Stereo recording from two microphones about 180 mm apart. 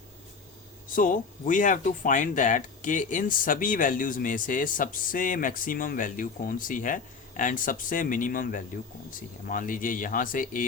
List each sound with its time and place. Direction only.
0.9 s speech: 50° left (ahead or behind)